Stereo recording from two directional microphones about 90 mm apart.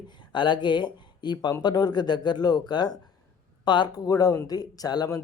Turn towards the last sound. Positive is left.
turn(degrees=45)  # may be behind; listen again after turning